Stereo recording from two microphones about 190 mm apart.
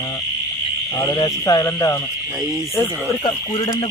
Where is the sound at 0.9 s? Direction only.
20° left (ahead or behind).